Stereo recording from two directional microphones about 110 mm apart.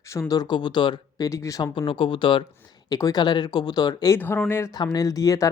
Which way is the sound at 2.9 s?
35° left (ahead or behind).